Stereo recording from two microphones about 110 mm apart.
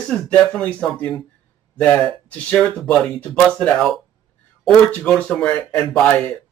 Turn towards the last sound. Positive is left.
turn(degrees=10)  # may be behind; listen again after turning